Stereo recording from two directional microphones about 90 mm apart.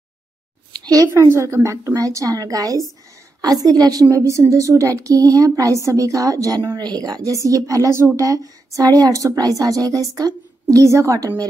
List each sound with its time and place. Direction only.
0.8 s a woman's voice: 35° right (ahead or behind)